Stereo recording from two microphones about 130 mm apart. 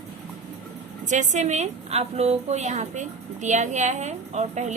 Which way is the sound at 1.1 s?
70° right (ahead or behind).